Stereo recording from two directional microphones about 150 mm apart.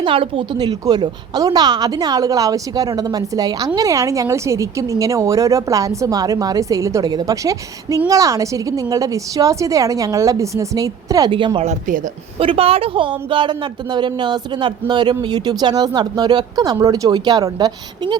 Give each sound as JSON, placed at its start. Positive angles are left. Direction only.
{"t": 0.0, "sound": "a woman's voice", "side_deg": -35}
{"t": 11.3, "sound": "speech", "side_deg": -35}
{"t": 11.6, "sound": "speech", "side_deg": -50}
{"t": 12.4, "sound": "a woman's voice", "side_deg": -40}